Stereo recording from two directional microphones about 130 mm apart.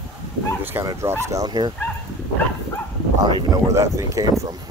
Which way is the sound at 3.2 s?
25° right (ahead or behind).